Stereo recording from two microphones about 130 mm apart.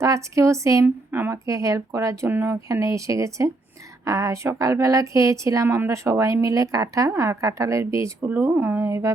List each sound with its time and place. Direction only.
0.0 s a woman's voice: 25° right (ahead or behind)